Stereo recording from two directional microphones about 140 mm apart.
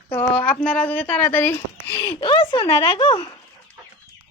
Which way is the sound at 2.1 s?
35° left (ahead or behind).